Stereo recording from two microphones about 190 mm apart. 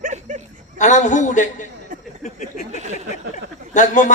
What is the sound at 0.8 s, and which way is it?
Speech, 40° left (ahead or behind).